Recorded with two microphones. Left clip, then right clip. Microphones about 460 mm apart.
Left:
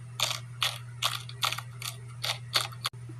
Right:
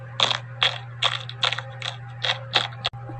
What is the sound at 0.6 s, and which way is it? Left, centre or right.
Mechanisms, left.